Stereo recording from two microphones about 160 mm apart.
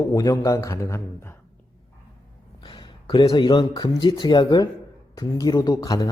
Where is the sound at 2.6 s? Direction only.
30° left (ahead or behind).